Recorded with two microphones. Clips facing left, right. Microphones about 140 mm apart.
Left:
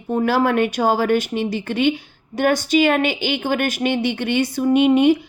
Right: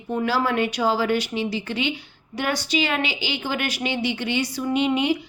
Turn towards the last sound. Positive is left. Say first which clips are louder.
# left 7 dB
turn(degrees=50)  # may be behind; listen again after turning